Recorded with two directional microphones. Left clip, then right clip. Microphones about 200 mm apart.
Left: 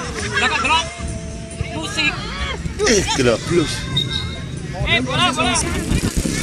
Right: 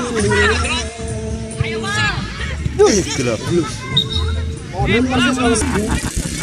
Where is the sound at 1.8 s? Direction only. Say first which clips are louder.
Right 1 dB; 40° left (ahead or behind).